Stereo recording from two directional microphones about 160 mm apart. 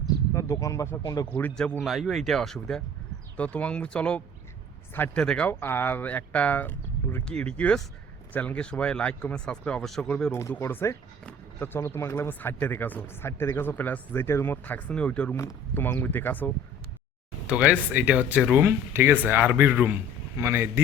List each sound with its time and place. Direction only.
0.3 s speech: 20° left (ahead or behind)
10.3 s speech: 15° left (ahead or behind)
17.4 s speech: 5° right (ahead or behind)